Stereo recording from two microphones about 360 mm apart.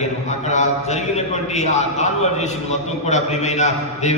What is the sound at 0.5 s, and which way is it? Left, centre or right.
A man's voice, centre.